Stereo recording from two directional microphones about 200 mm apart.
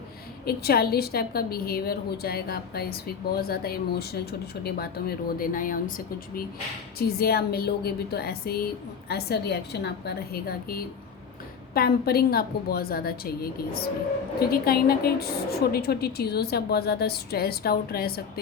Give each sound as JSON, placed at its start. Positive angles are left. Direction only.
{"t": 0.4, "sound": "a woman's voice", "side_deg": 50}
{"t": 7.0, "sound": "a woman's voice", "side_deg": 50}